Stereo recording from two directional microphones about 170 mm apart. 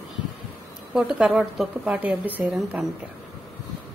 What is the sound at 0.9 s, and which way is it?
A woman's voice, 5° right (ahead or behind).